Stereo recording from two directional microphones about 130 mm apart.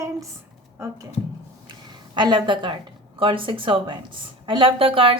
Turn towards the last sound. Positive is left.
turn(degrees=-45)  # may be behind; listen again after turning